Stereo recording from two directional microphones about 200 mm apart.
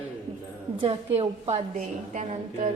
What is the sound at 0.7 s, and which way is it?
A woman's voice, 30° right (ahead or behind).